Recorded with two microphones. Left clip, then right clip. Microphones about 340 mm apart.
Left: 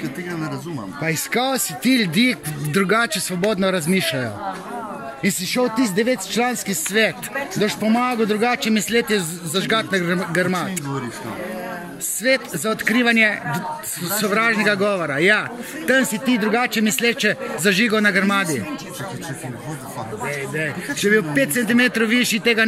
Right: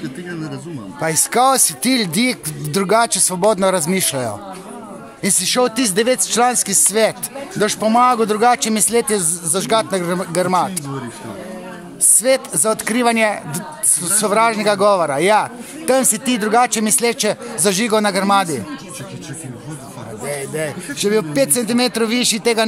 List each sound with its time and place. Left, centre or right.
1.3 s speech: right
5.2 s speech: right
12.2 s speech: centre
20.2 s a sound: right
21.0 s speech: centre